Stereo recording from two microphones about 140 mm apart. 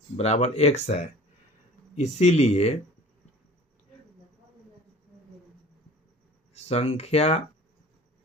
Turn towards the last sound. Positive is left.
turn(degrees=50)  # may be behind; listen again after turning